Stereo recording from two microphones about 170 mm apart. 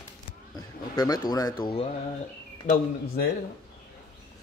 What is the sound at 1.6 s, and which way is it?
Speech, 35° left (ahead or behind).